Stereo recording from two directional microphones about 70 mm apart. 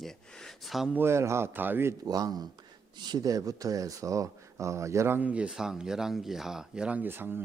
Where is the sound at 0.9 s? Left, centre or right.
Right.